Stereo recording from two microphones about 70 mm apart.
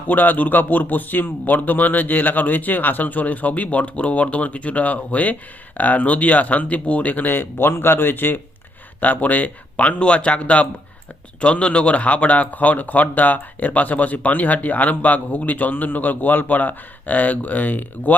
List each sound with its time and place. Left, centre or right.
0.1 s speech: left